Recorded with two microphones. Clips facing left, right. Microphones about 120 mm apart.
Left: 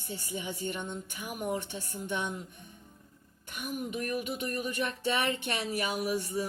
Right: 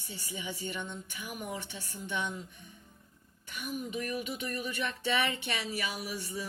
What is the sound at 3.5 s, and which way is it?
Speech, 55° left (ahead or behind).